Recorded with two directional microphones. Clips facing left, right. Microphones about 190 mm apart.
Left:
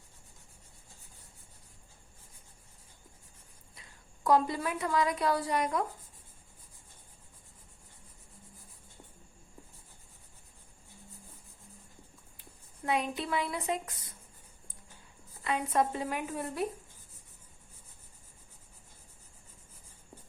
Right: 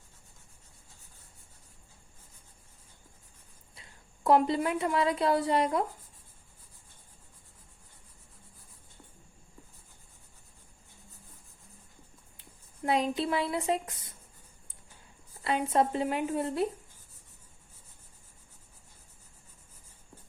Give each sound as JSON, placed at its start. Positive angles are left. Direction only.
{"t": 3.8, "sound": "a woman's voice", "side_deg": -25}
{"t": 12.8, "sound": "speech", "side_deg": -30}
{"t": 15.4, "sound": "a woman's voice", "side_deg": -30}